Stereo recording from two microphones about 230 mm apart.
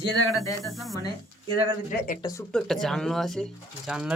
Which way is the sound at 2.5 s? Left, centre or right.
Centre.